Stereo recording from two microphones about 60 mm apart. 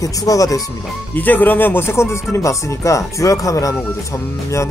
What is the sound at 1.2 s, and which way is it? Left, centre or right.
Speech, left.